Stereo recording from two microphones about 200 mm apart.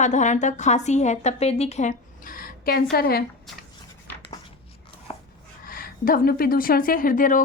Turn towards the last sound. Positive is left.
turn(degrees=45)  # may be behind; listen again after turning